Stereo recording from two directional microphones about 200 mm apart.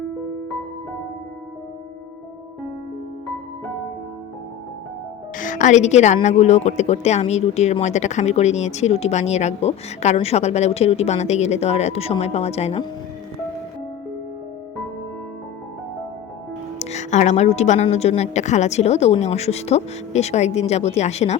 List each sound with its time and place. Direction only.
5.4 s a woman's voice: 40° left (ahead or behind)
16.7 s a woman's voice: 35° left (ahead or behind)